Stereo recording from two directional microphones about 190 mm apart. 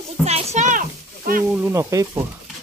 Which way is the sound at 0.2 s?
35° right (ahead or behind).